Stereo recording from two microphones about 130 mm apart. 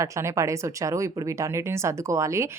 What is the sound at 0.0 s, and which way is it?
Speech, 20° right (ahead or behind).